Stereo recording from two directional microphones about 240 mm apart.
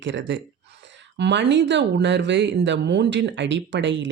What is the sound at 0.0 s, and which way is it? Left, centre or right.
Speech, right.